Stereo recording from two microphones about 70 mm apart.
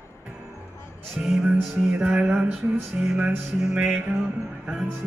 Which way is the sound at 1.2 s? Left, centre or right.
Centre.